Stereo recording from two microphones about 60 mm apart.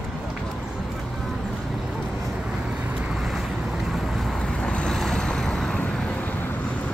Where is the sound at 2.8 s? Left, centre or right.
Centre.